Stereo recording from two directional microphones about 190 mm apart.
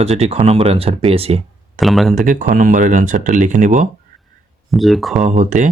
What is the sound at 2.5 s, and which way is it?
Speech, 45° right (ahead or behind).